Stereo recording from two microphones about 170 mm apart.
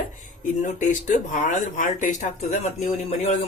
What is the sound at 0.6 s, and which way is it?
Speech, 45° left (ahead or behind).